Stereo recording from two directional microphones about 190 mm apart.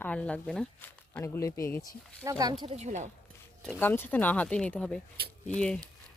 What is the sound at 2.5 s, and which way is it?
Speech, 30° right (ahead or behind).